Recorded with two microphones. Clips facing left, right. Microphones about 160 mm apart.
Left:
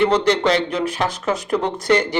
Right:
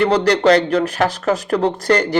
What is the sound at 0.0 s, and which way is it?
Speech, 40° right (ahead or behind).